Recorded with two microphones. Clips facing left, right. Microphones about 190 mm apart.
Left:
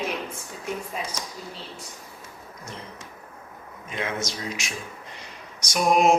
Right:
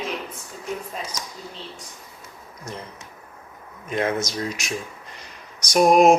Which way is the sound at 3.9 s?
45° right (ahead or behind).